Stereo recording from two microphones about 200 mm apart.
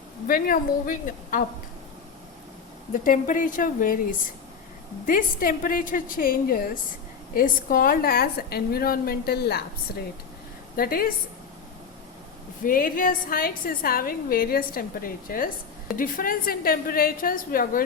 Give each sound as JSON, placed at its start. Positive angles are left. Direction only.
{"t": 0.3, "sound": "a woman's voice", "side_deg": 45}
{"t": 2.9, "sound": "a woman's voice", "side_deg": 40}
{"t": 5.0, "sound": "a woman's voice", "side_deg": 45}
{"t": 10.8, "sound": "a woman's voice", "side_deg": 45}
{"t": 12.6, "sound": "a woman's voice", "side_deg": 45}